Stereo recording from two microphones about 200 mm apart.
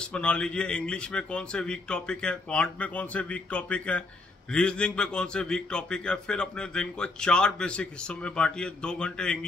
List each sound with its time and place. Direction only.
0.0 s a man's voice: 5° left (ahead or behind)